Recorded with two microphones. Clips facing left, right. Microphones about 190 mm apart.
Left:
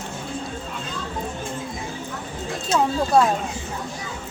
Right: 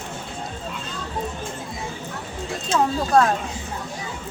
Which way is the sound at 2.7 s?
5° left (ahead or behind).